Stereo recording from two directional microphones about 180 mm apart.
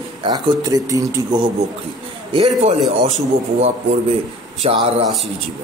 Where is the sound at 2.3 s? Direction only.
30° right (ahead or behind).